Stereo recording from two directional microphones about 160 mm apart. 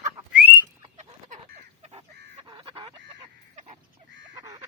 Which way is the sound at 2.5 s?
30° right (ahead or behind).